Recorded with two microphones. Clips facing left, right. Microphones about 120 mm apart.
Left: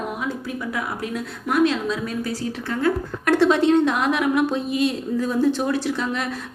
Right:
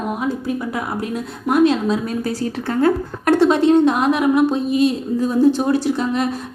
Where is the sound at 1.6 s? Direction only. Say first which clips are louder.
Right 5 dB; 40° right (ahead or behind).